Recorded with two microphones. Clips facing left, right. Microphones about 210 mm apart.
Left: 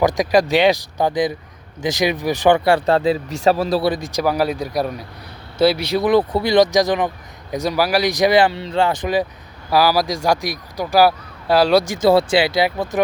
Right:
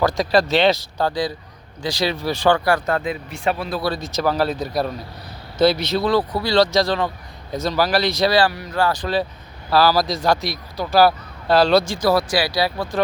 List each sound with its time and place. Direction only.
0.0 s speech: 15° left (ahead or behind); by 3.8 s 35° left (ahead or behind)
3.8 s speech: 15° left (ahead or behind)
11.9 s speech: 25° left (ahead or behind)